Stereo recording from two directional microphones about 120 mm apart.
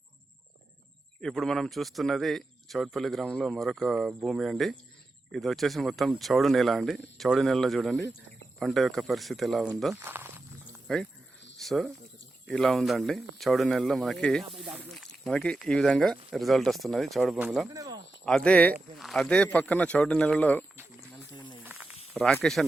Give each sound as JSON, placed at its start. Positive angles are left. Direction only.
{"t": 1.2, "sound": "a man's voice", "side_deg": 5}
{"t": 9.9, "sound": "walk", "side_deg": -20}
{"t": 11.6, "sound": "a man's voice", "side_deg": 0}
{"t": 17.3, "sound": "speech", "side_deg": -10}
{"t": 17.7, "sound": "a sound", "side_deg": -30}
{"t": 18.3, "sound": "speech", "side_deg": 5}
{"t": 21.6, "sound": "snake", "side_deg": -15}
{"t": 22.1, "sound": "snake", "side_deg": 0}